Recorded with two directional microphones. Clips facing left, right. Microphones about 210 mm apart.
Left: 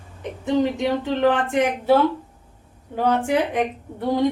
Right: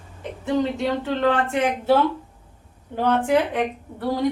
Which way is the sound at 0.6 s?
15° left (ahead or behind).